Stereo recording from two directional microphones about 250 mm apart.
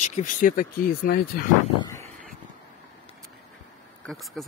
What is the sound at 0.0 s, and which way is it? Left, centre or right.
Speech, left.